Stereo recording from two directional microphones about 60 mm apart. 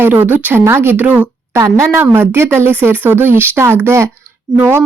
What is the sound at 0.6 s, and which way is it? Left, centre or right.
Speech, right.